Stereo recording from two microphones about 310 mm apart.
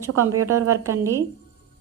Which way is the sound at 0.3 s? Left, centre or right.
Right.